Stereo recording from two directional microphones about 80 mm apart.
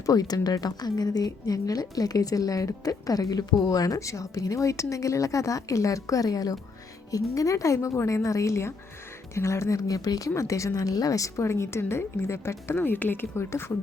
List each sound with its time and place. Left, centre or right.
0.0 s a woman's voice: left